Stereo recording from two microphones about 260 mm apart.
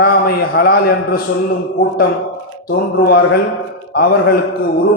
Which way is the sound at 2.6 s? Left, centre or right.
Left.